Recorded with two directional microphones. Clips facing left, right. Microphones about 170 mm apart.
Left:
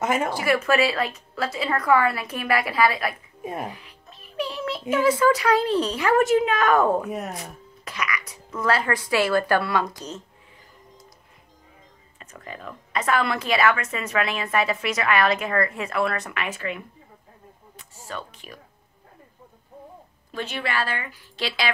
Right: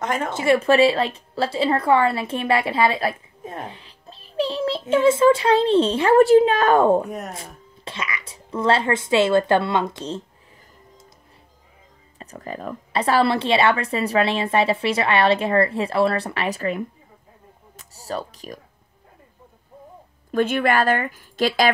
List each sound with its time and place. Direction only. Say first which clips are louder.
0.0 s a sound: left 1 dB; 5° left (ahead or behind)
0.3 s a child's voice: right 4 dB; 25° right (ahead or behind)
7.1 s speech: left 1 dB; centre (ahead or behind)
7.8 s a child's voice: left 1 dB; 25° right (ahead or behind)
12.2 s speech: right 7 dB; 35° right (ahead or behind)
20.2 s a woman's voice: right 10 dB; 50° right (ahead or behind)